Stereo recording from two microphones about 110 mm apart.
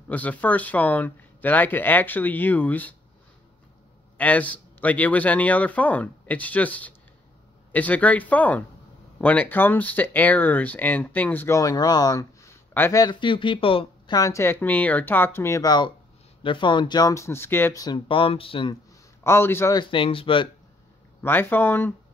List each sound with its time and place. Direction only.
0.1 s speech: 15° left (ahead or behind)
4.2 s speech: 15° left (ahead or behind)
13.0 s speech: 45° left (ahead or behind)
14.1 s speech: 30° left (ahead or behind)
16.4 s speech: 50° left (ahead or behind)
17.1 s speech: 25° left (ahead or behind)
17.9 s speech: 55° left (ahead or behind)
19.2 s speech: 20° left (ahead or behind)
19.7 s speech: 50° left (ahead or behind)
21.2 s speech: 20° left (ahead or behind)